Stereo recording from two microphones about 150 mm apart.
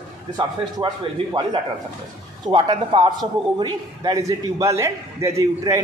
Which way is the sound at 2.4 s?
30° right (ahead or behind).